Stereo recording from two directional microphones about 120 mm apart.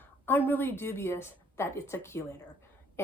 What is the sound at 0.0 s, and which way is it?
A woman's voice, 15° left (ahead or behind).